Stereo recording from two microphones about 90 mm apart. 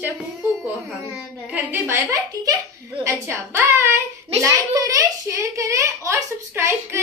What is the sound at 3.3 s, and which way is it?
Speech, 25° right (ahead or behind).